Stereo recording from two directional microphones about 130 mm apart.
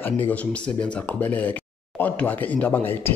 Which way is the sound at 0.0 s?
15° left (ahead or behind).